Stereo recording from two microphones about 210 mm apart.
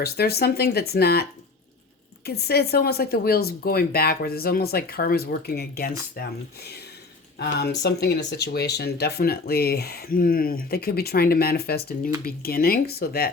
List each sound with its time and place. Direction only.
0.0 s speech: 50° left (ahead or behind)